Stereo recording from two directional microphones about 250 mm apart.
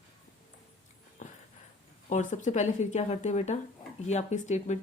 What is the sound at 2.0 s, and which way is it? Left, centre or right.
Speech, left.